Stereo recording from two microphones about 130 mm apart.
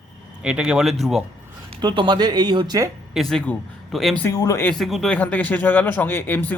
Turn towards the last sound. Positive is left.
turn(degrees=15)  # may be behind; listen again after turning